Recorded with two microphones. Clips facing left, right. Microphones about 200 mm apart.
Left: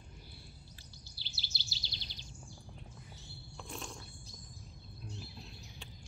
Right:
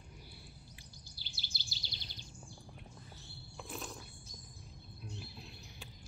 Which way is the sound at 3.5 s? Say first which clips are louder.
Right 1 dB; 5° right (ahead or behind).